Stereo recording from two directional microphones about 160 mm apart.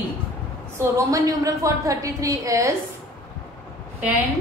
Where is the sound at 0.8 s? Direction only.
20° right (ahead or behind).